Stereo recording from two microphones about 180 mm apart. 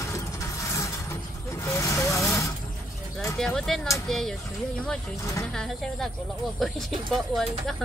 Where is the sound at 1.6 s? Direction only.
15° left (ahead or behind).